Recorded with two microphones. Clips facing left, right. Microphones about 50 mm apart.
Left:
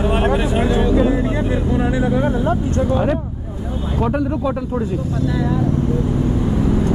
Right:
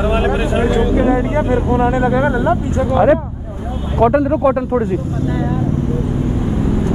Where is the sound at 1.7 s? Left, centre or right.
Right.